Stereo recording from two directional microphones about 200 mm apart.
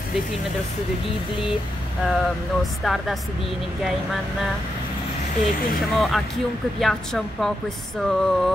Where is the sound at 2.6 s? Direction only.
Centre (ahead or behind).